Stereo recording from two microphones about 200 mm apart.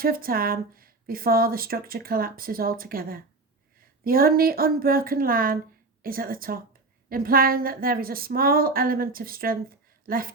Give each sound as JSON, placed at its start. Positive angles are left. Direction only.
{"t": 0.0, "sound": "speech", "side_deg": -45}